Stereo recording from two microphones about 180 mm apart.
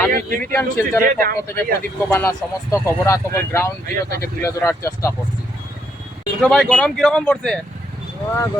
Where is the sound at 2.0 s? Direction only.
15° left (ahead or behind).